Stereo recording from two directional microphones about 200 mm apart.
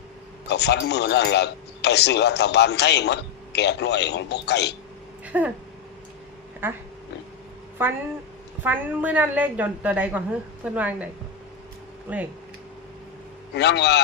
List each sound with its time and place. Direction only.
0.4 s a man's voice: 55° left (ahead or behind)
5.2 s a sound: 5° right (ahead or behind)
6.6 s a woman's voice: 10° right (ahead or behind)
7.8 s a woman's voice: 10° right (ahead or behind)
13.5 s a man's voice: 60° left (ahead or behind)